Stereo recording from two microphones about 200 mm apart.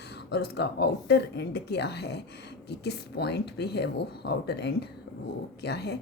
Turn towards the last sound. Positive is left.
turn(degrees=55)  # may be behind; listen again after turning